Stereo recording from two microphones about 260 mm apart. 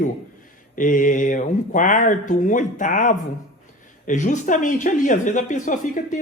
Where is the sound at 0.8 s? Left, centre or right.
Left.